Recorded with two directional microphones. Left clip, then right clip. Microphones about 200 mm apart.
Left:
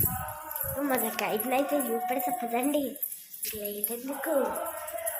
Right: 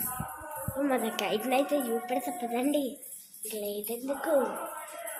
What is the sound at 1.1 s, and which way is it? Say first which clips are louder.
A woman's voice: even; 10° right (ahead or behind).